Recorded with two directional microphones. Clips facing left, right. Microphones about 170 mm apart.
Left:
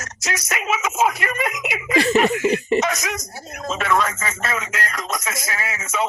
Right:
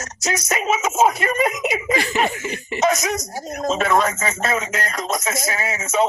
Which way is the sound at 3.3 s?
40° right (ahead or behind).